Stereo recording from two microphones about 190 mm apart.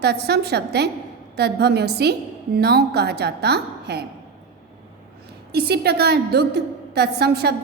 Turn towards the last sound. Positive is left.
turn(degrees=-60)  # may be behind; listen again after turning